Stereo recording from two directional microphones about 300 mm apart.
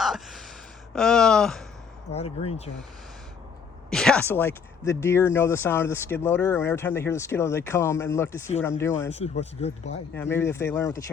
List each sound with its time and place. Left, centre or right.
0.0 s a sound: centre
2.1 s speech: centre
3.8 s speech: centre
9.1 s speech: left
10.2 s speech: centre